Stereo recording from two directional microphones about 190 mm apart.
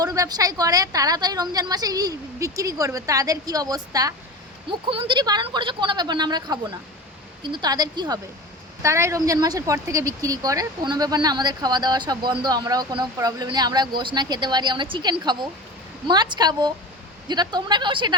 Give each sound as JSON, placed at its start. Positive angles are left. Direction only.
{"t": 0.0, "sound": "speech", "side_deg": -20}